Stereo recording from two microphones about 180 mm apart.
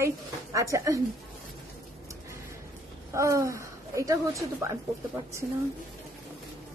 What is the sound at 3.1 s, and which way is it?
A woman's voice, 15° right (ahead or behind).